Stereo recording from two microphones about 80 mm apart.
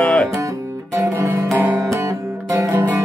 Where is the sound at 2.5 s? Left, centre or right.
Right.